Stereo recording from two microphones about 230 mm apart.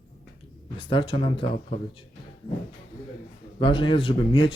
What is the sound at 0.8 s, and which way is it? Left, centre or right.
Speech, left.